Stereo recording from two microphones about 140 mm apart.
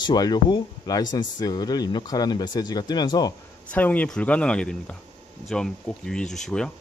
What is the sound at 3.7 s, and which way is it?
Speech, 10° left (ahead or behind).